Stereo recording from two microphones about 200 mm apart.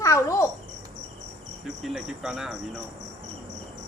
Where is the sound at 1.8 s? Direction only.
Centre (ahead or behind).